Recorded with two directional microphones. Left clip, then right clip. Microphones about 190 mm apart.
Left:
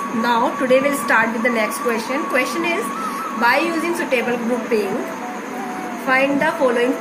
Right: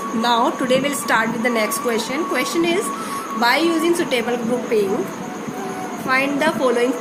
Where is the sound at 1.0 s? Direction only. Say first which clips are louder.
Left 2 dB; 30° right (ahead or behind).